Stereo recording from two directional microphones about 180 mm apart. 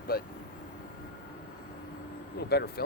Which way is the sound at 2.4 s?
65° left (ahead or behind).